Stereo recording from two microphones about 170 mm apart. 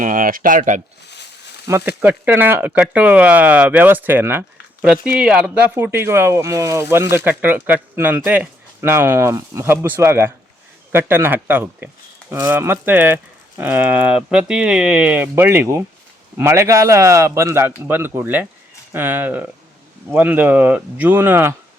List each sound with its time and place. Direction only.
0.0 s speech: 55° right (ahead or behind)
1.0 s a sound: 80° left
1.6 s speech: 15° right (ahead or behind)